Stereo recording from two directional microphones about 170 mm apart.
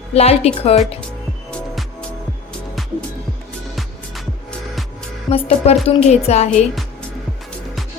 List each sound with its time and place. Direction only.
0.1 s a woman's voice: 35° left (ahead or behind)
1.5 s music: 5° left (ahead or behind)
5.3 s a woman's voice: 35° left (ahead or behind)